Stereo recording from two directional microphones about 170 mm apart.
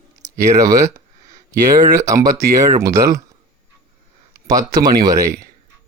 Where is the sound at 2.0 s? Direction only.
15° right (ahead or behind).